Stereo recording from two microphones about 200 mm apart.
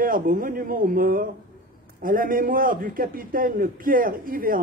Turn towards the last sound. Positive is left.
turn(degrees=-45)  # may be behind; listen again after turning